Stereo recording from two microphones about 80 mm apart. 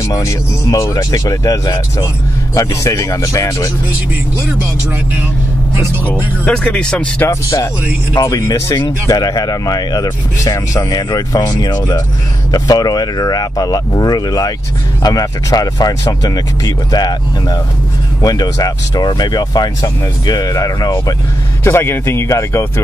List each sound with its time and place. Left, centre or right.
0.0 s speech: left
6.0 s speech: centre
7.2 s speech: left
21.6 s speech: left